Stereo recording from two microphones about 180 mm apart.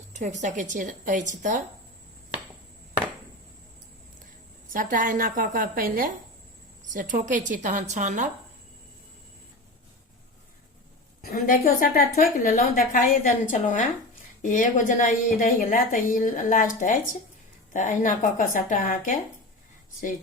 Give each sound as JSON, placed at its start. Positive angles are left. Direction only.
{"t": 0.1, "sound": "speech", "side_deg": -40}
{"t": 4.7, "sound": "speech", "side_deg": -45}
{"t": 11.2, "sound": "a woman's voice", "side_deg": 55}